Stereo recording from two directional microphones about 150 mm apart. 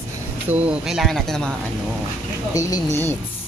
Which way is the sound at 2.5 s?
25° left (ahead or behind).